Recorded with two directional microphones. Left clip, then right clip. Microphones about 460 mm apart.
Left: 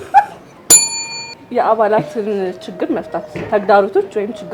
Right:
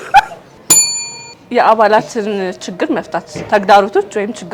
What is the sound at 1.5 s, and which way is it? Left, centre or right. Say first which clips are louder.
A woman's voice: right 4 dB; centre.